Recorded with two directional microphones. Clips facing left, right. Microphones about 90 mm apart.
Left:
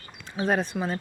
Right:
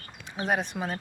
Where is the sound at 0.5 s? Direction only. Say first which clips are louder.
Left 1 dB; 15° right (ahead or behind).